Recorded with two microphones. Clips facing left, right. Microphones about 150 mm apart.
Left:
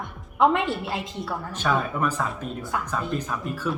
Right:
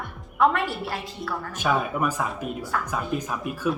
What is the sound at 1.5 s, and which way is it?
Speech, 10° right (ahead or behind).